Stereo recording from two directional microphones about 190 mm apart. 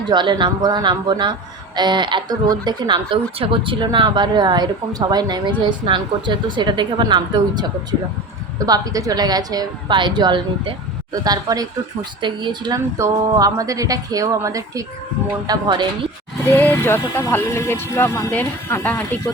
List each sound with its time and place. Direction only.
0.1 s a woman's voice: 25° right (ahead or behind)
16.5 s speech: 10° left (ahead or behind)